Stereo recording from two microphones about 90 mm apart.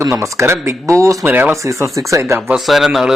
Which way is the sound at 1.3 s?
20° right (ahead or behind).